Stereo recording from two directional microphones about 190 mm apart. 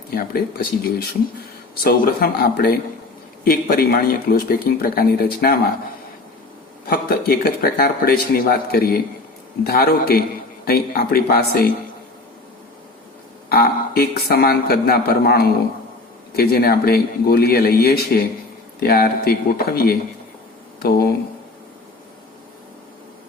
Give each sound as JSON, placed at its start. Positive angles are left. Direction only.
{"t": 0.1, "sound": "speech", "side_deg": 50}
{"t": 1.8, "sound": "speech", "side_deg": 55}
{"t": 6.8, "sound": "speech", "side_deg": 50}
{"t": 13.5, "sound": "speech", "side_deg": 55}